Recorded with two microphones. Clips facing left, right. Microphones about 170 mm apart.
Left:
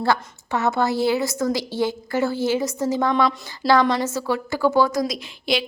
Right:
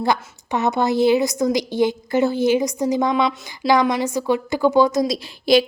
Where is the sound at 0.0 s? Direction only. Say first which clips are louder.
Right 1 dB; 20° right (ahead or behind).